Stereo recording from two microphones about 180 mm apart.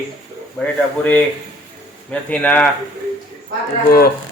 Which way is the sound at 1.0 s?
10° left (ahead or behind).